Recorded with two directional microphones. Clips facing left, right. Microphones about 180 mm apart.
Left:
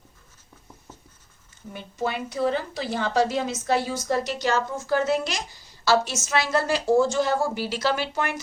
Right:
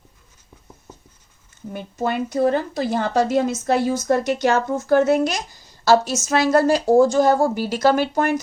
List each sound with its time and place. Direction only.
1.7 s a woman's voice: 50° right (ahead or behind)